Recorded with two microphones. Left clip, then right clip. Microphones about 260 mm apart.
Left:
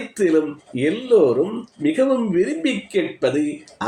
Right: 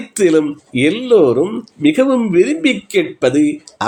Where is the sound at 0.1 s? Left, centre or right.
Right.